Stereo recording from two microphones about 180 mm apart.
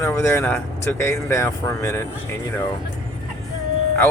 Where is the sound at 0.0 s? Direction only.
15° left (ahead or behind).